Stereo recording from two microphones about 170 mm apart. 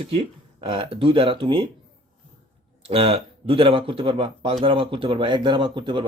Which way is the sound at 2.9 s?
35° right (ahead or behind).